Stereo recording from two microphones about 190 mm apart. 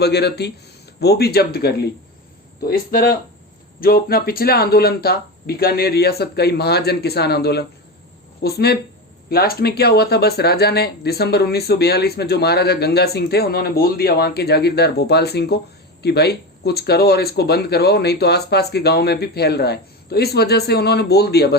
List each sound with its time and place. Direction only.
0.0 s speech: 60° left (ahead or behind)